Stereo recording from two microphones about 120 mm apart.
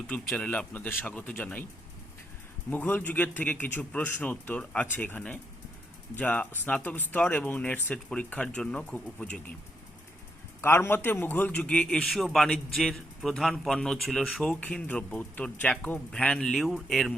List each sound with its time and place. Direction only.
0.3 s speech: 10° left (ahead or behind)
2.6 s speech: 15° left (ahead or behind)
10.6 s a man's voice: 20° left (ahead or behind); by 14.6 s centre (ahead or behind)
14.6 s speech: 10° left (ahead or behind)